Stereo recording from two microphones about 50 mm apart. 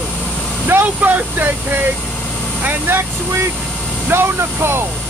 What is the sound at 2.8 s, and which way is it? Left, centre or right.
Speech, right.